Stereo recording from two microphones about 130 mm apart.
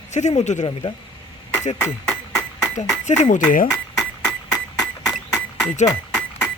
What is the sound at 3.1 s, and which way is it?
Speech, 65° left (ahead or behind).